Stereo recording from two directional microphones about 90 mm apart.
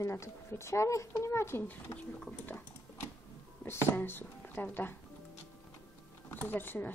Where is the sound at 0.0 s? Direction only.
30° left (ahead or behind).